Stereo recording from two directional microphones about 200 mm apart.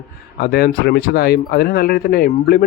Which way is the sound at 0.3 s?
50° left (ahead or behind).